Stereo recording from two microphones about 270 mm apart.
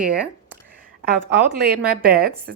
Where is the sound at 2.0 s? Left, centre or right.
Right.